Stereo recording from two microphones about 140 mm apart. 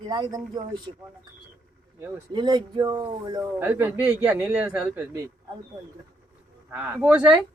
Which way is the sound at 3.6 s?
15° right (ahead or behind).